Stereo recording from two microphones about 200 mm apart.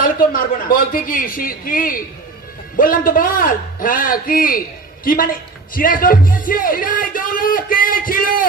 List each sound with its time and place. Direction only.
0.0 s speech: 45° left (ahead or behind)